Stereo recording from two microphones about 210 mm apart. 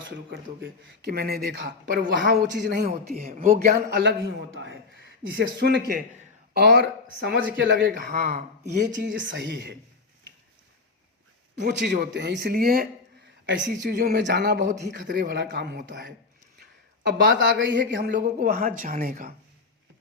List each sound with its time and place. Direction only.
0.0 s speech: 60° right (ahead or behind)
5.4 s speech: 55° right (ahead or behind)
7.9 s speech: 45° right (ahead or behind)
11.6 s speech: 55° right (ahead or behind)
17.2 s speech: 60° right (ahead or behind); by 19.3 s 40° right (ahead or behind)